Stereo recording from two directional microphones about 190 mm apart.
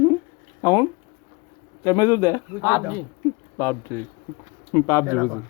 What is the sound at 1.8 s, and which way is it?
A man's voice, 15° left (ahead or behind).